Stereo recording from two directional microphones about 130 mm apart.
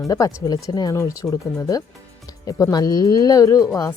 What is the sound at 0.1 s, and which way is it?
Speech, 25° left (ahead or behind).